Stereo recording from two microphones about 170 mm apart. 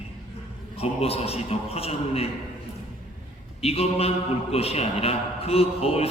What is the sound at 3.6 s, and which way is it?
A man's voice, 35° left (ahead or behind).